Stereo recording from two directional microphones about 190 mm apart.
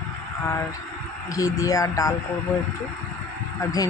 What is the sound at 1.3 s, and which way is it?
Speech, 15° left (ahead or behind).